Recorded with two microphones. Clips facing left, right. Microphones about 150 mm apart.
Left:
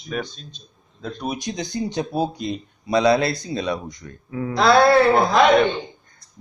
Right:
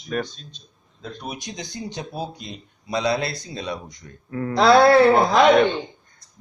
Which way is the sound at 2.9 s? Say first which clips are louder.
Left 6 dB; 75° left (ahead or behind).